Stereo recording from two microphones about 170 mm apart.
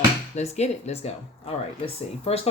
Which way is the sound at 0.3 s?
40° left (ahead or behind).